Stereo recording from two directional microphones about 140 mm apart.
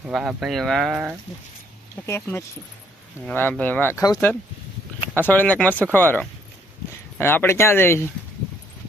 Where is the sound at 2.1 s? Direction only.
20° left (ahead or behind).